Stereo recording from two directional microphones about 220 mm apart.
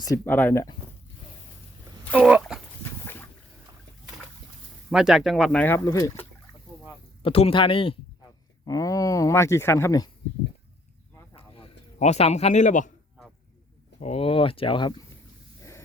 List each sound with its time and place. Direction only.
0.0 s speech: 10° left (ahead or behind)
2.0 s speech: 5° left (ahead or behind)
3.0 s boat: 10° left (ahead or behind)
4.9 s speech: centre (ahead or behind); by 6.2 s 15° left (ahead or behind)
7.2 s speech: 25° left (ahead or behind)
11.3 s a sound: 25° left (ahead or behind)
14.0 s speech: 25° left (ahead or behind)